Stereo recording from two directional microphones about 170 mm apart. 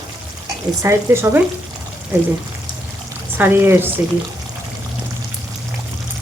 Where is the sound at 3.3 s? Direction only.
15° right (ahead or behind).